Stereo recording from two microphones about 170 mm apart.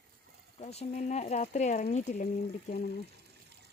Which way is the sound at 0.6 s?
40° left (ahead or behind).